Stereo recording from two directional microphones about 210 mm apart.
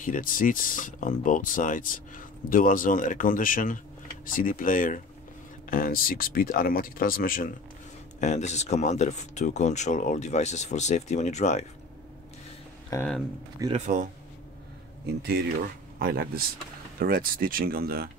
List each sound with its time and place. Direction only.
0.0 s speech: 40° left (ahead or behind)
12.9 s speech: 15° left (ahead or behind)
13.7 s speech: 35° right (ahead or behind)
16.0 s speech: 45° right (ahead or behind)